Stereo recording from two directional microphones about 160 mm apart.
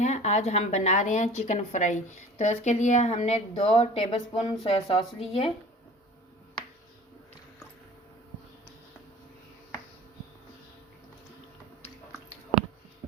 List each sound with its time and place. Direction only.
0.0 s speech: 45° left (ahead or behind)